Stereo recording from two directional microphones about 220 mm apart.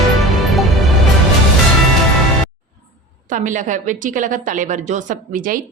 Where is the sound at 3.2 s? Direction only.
35° right (ahead or behind).